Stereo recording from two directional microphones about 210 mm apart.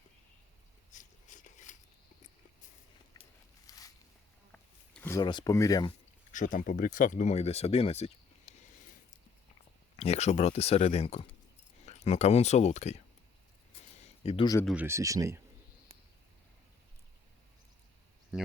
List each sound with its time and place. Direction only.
0.9 s a sound: 35° left (ahead or behind)
3.7 s walk: 15° left (ahead or behind)
4.5 s a sound: 10° left (ahead or behind)
6.3 s speech: 40° left (ahead or behind)
10.0 s speech: 30° left (ahead or behind)
14.3 s speech: 20° left (ahead or behind)
14.6 s speech: centre (ahead or behind)
14.8 s speech: 15° right (ahead or behind)